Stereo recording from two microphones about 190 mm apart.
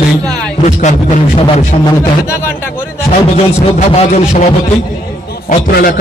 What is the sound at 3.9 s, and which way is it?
Speech, 35° left (ahead or behind).